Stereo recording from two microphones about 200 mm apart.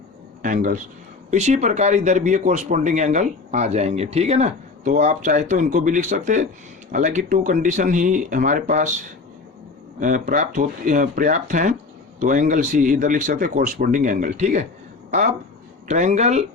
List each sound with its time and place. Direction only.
0.4 s speech: 40° right (ahead or behind)
10.0 s speech: 40° right (ahead or behind)
15.9 s speech: 35° right (ahead or behind)